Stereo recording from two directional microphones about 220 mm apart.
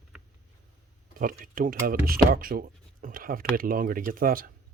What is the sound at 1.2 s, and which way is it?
Speech, 40° right (ahead or behind).